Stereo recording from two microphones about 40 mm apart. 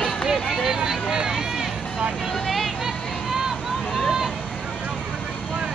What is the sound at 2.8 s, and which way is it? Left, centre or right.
Vehicle, centre.